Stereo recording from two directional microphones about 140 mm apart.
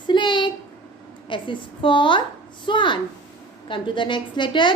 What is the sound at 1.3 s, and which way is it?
A woman's voice, 35° left (ahead or behind).